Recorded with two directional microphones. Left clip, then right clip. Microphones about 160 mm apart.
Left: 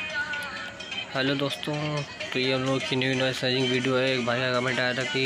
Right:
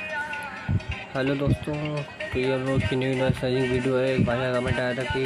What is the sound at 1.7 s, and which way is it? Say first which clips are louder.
Speech: even; centre (ahead or behind).